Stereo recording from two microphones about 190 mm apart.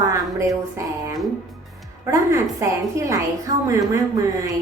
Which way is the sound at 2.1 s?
15° right (ahead or behind).